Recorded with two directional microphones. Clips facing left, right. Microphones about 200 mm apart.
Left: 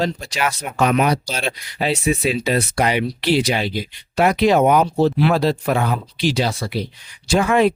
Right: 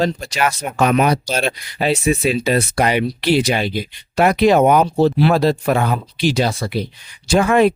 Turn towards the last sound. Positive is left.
turn(degrees=-50)  # may be behind; listen again after turning